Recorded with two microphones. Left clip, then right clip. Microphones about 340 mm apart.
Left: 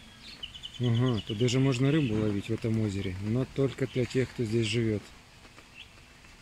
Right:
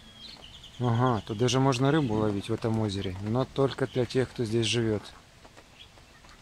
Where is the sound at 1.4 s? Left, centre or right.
Right.